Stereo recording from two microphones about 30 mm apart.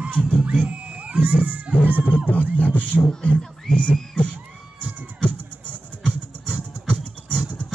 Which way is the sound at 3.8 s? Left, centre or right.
Left.